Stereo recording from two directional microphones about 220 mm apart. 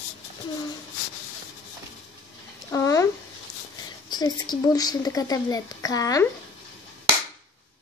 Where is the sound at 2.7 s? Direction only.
15° left (ahead or behind).